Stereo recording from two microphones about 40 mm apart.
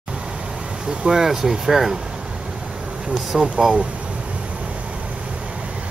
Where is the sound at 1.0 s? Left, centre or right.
Centre.